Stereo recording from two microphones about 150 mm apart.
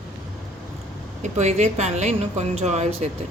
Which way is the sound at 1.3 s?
50° right (ahead or behind).